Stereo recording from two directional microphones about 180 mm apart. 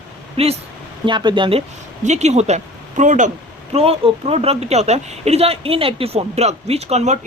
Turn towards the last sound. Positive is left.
turn(degrees=-40)  # may be behind; listen again after turning